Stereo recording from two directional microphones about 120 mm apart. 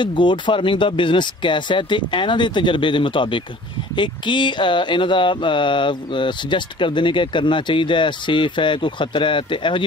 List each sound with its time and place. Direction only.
0.0 s speech: 40° left (ahead or behind)